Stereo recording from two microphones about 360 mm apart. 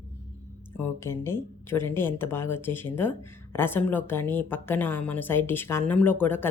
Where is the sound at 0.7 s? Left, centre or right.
Centre.